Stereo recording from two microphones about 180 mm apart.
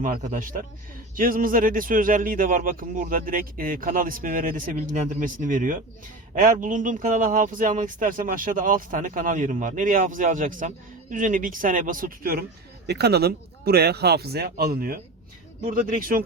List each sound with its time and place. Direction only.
0.0 s speech: 45° right (ahead or behind)
12.9 s speech: 65° right (ahead or behind)